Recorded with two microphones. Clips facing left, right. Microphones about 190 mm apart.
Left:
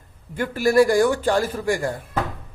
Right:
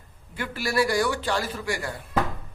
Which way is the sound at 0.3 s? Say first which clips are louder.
Left 9 dB; 45° left (ahead or behind).